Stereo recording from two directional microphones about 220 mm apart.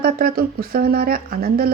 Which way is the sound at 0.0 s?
40° right (ahead or behind).